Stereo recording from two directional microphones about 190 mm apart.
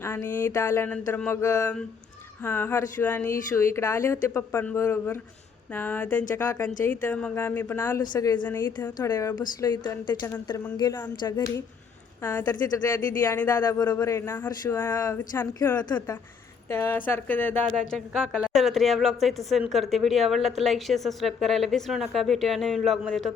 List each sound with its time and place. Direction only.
0.0 s a woman's voice: 15° left (ahead or behind)
15.8 s a woman's voice: 20° left (ahead or behind); by 23.3 s centre (ahead or behind)